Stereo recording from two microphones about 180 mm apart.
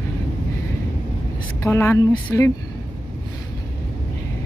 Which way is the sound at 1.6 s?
15° left (ahead or behind).